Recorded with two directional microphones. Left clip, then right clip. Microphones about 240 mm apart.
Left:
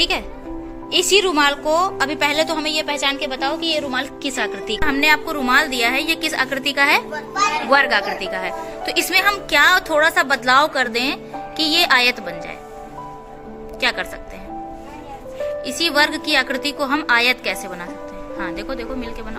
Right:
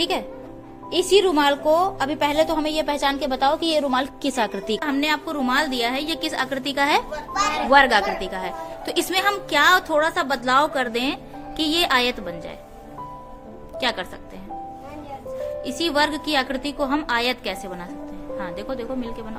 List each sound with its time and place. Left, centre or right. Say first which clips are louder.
0.0 s a woman's voice: left 4 dB; centre
4.8 s a woman's voice: left 9 dB; centre
13.7 s speech: left 4 dB; centre
15.6 s a woman's voice: left 4 dB; centre